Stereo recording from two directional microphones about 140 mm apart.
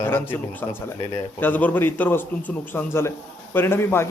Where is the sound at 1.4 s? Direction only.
15° left (ahead or behind).